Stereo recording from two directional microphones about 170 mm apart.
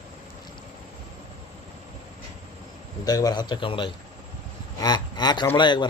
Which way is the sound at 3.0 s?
20° left (ahead or behind).